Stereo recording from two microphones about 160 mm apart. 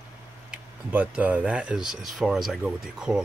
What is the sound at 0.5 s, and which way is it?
Speech, 5° right (ahead or behind).